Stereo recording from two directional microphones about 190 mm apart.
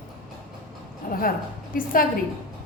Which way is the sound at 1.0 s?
45° left (ahead or behind).